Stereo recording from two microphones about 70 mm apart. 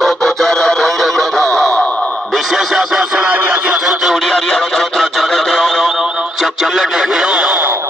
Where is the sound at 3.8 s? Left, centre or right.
Centre.